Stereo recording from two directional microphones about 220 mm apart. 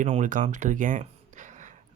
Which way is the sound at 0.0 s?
35° right (ahead or behind).